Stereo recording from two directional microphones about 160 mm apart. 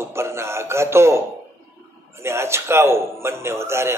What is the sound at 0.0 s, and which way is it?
Music, 15° right (ahead or behind).